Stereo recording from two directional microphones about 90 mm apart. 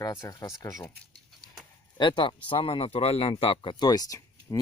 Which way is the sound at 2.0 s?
65° left (ahead or behind).